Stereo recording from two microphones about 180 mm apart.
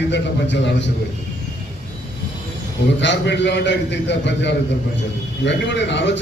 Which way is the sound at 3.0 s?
75° left (ahead or behind).